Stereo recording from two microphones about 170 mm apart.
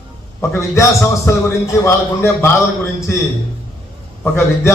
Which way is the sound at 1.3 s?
15° left (ahead or behind).